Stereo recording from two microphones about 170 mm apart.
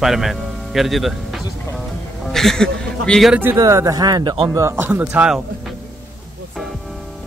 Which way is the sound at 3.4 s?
15° right (ahead or behind).